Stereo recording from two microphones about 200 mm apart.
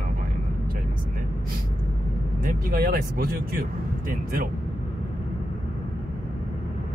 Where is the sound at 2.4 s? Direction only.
45° right (ahead or behind).